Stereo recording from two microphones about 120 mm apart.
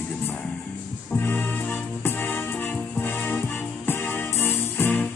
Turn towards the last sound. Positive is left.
turn(degrees=15)  # may be behind; listen again after turning